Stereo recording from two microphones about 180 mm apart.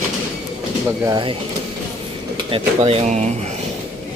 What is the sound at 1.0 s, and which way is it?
Speech, 25° right (ahead or behind).